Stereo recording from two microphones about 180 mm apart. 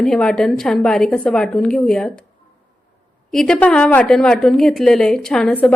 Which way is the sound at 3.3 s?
5° left (ahead or behind).